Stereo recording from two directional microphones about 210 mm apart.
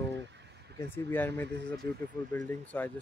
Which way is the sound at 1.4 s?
55° right (ahead or behind).